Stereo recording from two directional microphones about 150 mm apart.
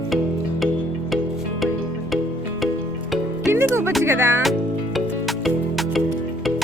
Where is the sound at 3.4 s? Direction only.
20° right (ahead or behind).